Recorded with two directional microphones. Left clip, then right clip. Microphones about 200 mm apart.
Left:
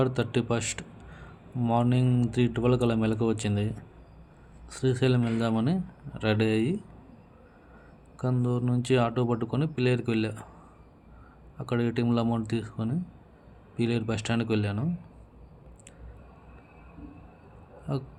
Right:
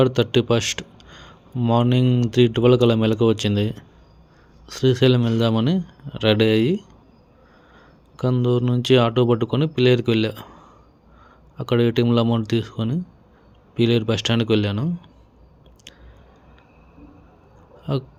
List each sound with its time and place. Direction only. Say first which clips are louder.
0.0 s speech: right 9 dB; 35° right (ahead or behind)
8.1 s speech: right 9 dB; 35° right (ahead or behind)
11.5 s speech: right 10 dB; 35° right (ahead or behind)
17.9 s speech: right 8 dB; 35° right (ahead or behind)